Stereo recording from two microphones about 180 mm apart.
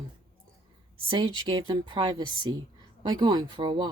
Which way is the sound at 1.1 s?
30° right (ahead or behind).